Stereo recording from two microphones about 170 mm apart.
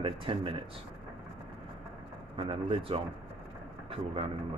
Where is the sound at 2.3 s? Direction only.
30° right (ahead or behind).